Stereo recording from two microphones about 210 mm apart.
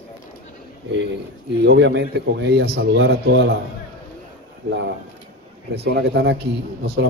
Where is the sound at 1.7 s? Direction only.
55° right (ahead or behind).